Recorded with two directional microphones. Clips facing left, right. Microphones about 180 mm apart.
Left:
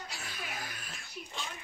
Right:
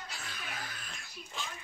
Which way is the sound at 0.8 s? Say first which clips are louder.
Left 3 dB; 5° left (ahead or behind).